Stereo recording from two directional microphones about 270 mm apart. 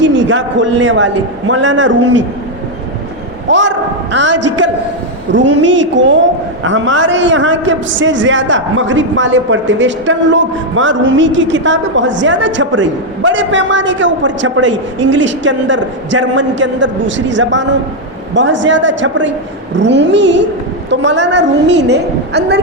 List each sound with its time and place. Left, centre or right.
0.0 s a man's voice: right
3.5 s a woman's voice: right